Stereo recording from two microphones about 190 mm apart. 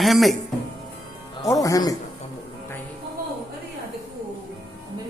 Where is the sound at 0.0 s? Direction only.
Centre (ahead or behind).